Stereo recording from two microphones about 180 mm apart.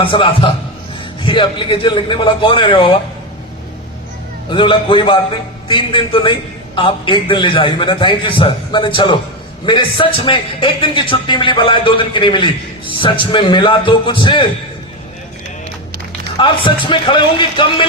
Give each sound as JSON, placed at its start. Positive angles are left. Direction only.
{"t": 0.0, "sound": "a man's voice", "side_deg": 30}
{"t": 4.4, "sound": "a man's voice", "side_deg": 30}
{"t": 16.4, "sound": "a man's voice", "side_deg": 30}